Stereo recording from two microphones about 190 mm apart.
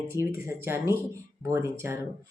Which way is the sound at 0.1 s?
15° right (ahead or behind).